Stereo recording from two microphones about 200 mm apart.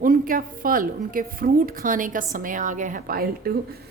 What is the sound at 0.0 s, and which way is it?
A woman's voice, 45° right (ahead or behind).